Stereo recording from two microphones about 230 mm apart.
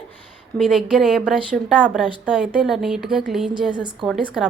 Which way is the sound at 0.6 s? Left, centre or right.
Centre.